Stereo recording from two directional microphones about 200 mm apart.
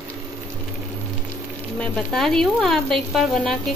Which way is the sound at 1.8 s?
5° left (ahead or behind).